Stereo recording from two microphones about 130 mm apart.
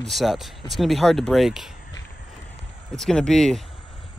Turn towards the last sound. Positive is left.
turn(degrees=5)  # may be behind; listen again after turning